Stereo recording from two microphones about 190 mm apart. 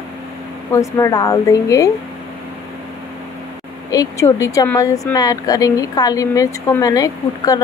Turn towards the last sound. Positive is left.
turn(degrees=20)  # may be behind; listen again after turning